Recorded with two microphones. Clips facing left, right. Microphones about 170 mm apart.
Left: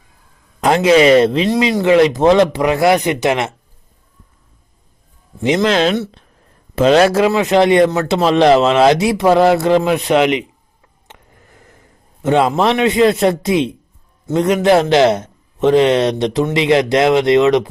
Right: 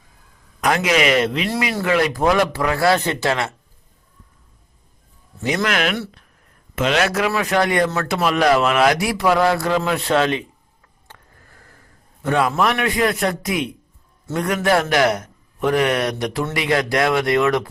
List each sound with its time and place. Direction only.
0.6 s a man's voice: 30° left (ahead or behind)
1.5 s a man's voice: 20° left (ahead or behind)
5.4 s a man's voice: 20° left (ahead or behind)
11.1 s a sound: 20° left (ahead or behind)
14.3 s a man's voice: 20° left (ahead or behind)